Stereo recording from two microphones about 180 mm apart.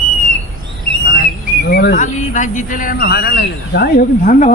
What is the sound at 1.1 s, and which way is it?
Speech, 60° left (ahead or behind).